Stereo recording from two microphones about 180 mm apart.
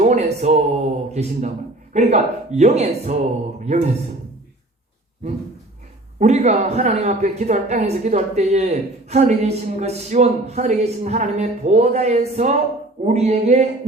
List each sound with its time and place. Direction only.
0.0 s speech: 40° right (ahead or behind)
6.1 s speech: 40° right (ahead or behind)